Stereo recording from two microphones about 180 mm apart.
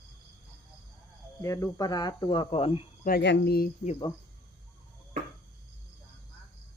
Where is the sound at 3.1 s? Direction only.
65° left (ahead or behind).